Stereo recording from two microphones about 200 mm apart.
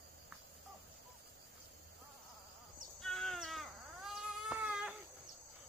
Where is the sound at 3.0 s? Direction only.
Centre (ahead or behind).